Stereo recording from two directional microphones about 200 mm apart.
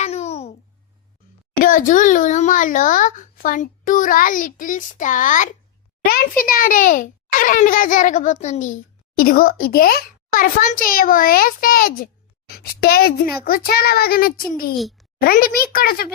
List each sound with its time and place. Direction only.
0.0 s babbling: 35° left (ahead or behind)
1.6 s a child's voice: 40° left (ahead or behind)
14.8 s a child's voice: centre (ahead or behind)
15.2 s a child's voice: 45° left (ahead or behind)